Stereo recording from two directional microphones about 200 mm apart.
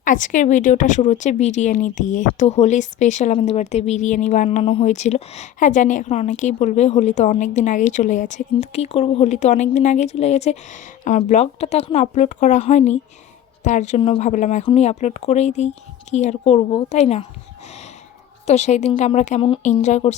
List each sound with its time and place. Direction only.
0.0 s speech: 40° left (ahead or behind)
18.4 s speech: 35° left (ahead or behind)